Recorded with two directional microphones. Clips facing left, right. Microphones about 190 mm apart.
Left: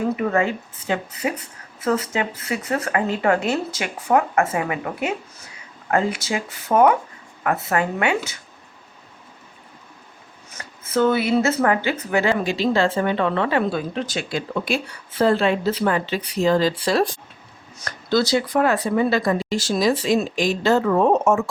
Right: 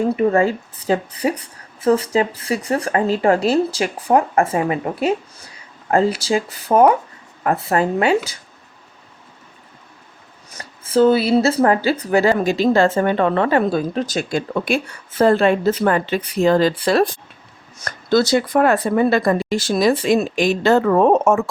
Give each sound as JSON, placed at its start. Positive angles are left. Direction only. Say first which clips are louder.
{"t": 0.0, "sound": "speech", "louder": "right 5 dB", "side_deg": -30}
{"t": 10.5, "sound": "speech", "louder": "right 5 dB", "side_deg": -35}